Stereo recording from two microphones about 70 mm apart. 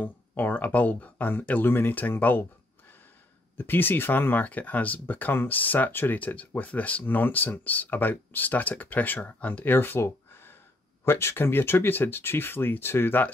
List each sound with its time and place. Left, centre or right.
0.4 s speech: left
3.5 s speech: left